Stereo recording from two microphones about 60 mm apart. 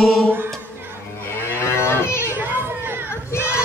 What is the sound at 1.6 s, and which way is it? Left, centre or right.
Moo, left.